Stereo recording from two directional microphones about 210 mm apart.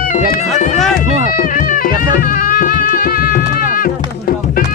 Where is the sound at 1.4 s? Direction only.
40° left (ahead or behind).